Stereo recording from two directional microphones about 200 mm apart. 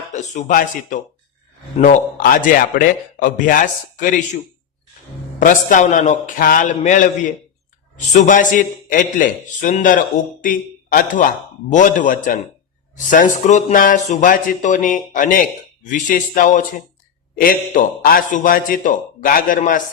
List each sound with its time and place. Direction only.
0.1 s speech: 35° left (ahead or behind)
5.4 s a man's voice: 45° left (ahead or behind)